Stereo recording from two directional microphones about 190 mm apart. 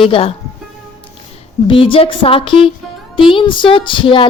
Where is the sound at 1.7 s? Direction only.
25° left (ahead or behind).